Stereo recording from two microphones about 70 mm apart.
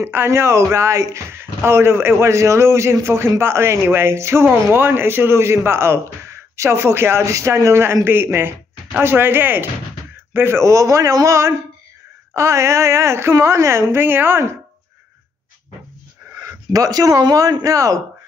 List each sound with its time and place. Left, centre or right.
0.0 s a woman's voice: right
13.9 s speech: right
16.7 s a man's voice: right
17.2 s a man's voice: right